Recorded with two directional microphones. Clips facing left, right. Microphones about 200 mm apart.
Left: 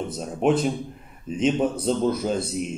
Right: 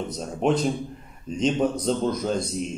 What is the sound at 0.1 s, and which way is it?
Speech, 5° left (ahead or behind).